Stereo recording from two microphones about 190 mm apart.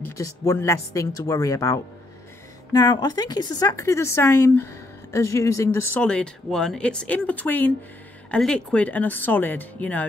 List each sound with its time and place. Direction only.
0.2 s a woman's voice: 15° left (ahead or behind)